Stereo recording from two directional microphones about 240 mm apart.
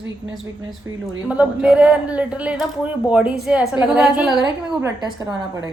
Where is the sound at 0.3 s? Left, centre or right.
Centre.